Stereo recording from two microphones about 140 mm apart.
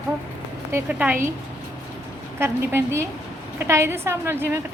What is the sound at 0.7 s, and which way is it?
Speech, 15° right (ahead or behind).